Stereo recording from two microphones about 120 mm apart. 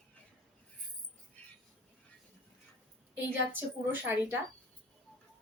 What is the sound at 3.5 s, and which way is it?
Speech, 15° right (ahead or behind).